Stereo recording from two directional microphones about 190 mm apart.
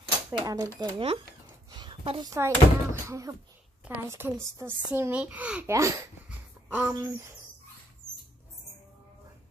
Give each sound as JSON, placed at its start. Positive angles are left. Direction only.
{"t": 0.3, "sound": "speech", "side_deg": -20}
{"t": 1.7, "sound": "a sound", "side_deg": -25}
{"t": 2.3, "sound": "a child's voice", "side_deg": -15}
{"t": 8.0, "sound": "dog", "side_deg": -15}